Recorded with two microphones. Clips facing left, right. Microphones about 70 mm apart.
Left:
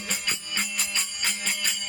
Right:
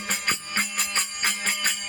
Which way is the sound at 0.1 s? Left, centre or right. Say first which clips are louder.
Right 5 dB; right.